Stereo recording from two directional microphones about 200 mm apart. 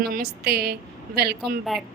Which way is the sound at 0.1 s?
50° right (ahead or behind).